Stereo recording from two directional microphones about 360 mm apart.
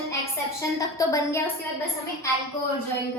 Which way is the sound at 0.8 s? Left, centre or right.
Centre.